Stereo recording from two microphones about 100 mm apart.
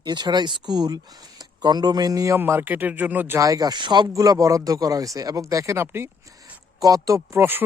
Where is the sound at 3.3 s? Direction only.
35° right (ahead or behind).